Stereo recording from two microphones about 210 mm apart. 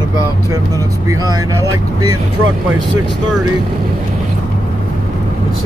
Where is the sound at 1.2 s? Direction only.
15° right (ahead or behind).